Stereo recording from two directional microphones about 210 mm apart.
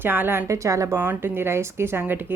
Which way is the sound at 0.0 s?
10° right (ahead or behind).